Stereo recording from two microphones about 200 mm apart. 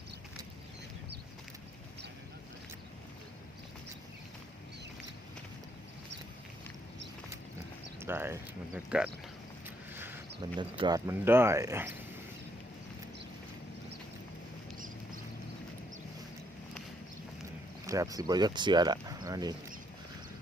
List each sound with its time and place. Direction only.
8.0 s speech: 10° right (ahead or behind)
9.6 s vehicle: 10° right (ahead or behind)
10.6 s speech: 20° right (ahead or behind)
17.8 s speech: 15° right (ahead or behind)